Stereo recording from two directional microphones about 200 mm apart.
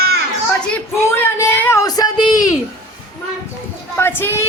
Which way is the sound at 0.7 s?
10° left (ahead or behind).